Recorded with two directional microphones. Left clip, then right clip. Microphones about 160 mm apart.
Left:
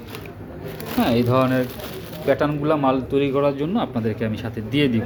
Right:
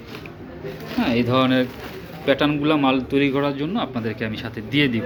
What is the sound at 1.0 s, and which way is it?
Speech, 15° left (ahead or behind).